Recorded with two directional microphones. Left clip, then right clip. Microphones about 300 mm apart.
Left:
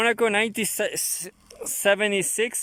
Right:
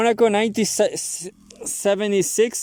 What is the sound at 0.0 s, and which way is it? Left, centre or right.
Speech, centre.